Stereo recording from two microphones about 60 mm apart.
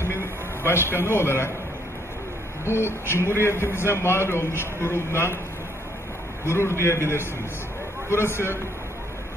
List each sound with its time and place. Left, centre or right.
0.0 s a sound: left
2.6 s a man's voice: left
6.4 s a man's voice: left
8.1 s a man's voice: left